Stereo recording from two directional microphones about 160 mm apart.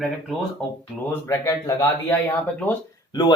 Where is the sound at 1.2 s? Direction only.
15° left (ahead or behind).